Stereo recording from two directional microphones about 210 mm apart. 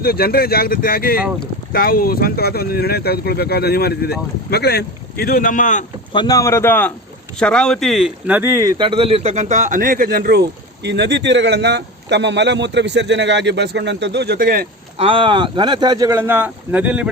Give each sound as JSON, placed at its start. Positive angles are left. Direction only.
{"t": 0.0, "sound": "speech", "side_deg": 45}
{"t": 6.1, "sound": "a man's voice", "side_deg": 15}
{"t": 14.9, "sound": "speech", "side_deg": -25}